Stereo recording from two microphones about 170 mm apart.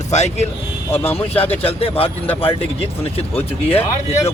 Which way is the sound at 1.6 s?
35° left (ahead or behind).